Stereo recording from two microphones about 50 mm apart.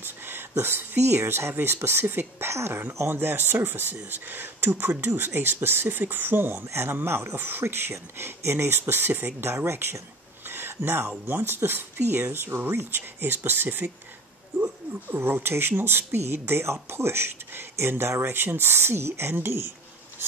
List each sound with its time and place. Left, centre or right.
0.0 s speech: right
3.1 s speech: right
7.3 s speech: right
9.4 s speech: right
10.5 s a sound: right
11.2 s speech: right
18.4 s speech: right